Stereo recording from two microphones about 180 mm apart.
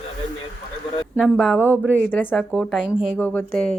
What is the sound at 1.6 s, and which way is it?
Speech, 10° right (ahead or behind).